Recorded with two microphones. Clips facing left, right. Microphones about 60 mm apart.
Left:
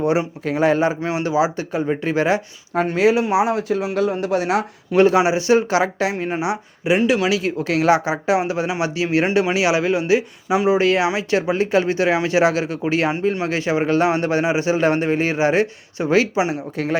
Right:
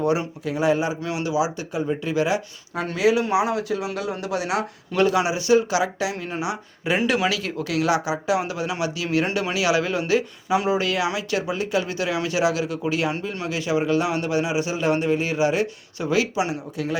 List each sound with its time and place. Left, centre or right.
0.0 s speech: left
0.4 s speech: left
1.0 s a man's voice: left
6.9 s speech: centre
7.3 s a man's voice: left
10.7 s a man's voice: left